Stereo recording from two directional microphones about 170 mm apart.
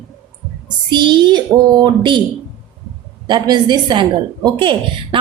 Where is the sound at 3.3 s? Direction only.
25° right (ahead or behind).